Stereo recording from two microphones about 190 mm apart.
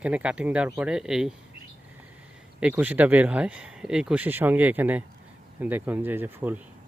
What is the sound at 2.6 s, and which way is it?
Speech, 5° right (ahead or behind).